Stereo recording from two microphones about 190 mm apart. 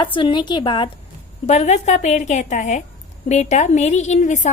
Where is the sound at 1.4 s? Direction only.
35° left (ahead or behind).